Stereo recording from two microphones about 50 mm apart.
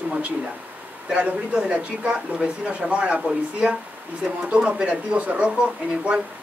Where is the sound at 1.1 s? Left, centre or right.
Right.